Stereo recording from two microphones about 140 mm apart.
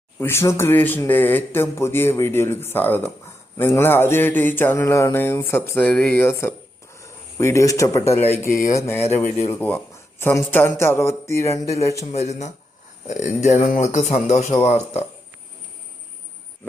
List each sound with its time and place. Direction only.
0.2 s a man's voice: 20° left (ahead or behind)
12.1 s speech: 55° left (ahead or behind)
13.7 s speech: 65° left (ahead or behind)